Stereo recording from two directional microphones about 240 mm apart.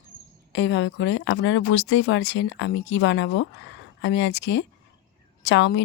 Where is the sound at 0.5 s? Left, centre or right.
Left.